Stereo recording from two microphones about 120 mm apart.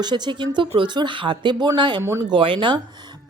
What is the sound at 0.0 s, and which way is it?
Speech, 40° right (ahead or behind).